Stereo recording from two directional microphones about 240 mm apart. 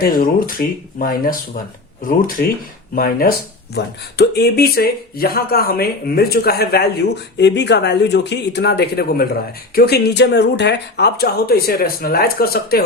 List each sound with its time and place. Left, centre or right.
0.0 s speech: left